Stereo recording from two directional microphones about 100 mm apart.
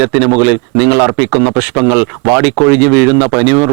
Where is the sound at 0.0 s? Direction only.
15° right (ahead or behind).